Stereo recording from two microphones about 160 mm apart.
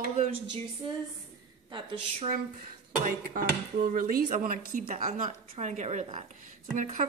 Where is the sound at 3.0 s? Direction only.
60° right (ahead or behind).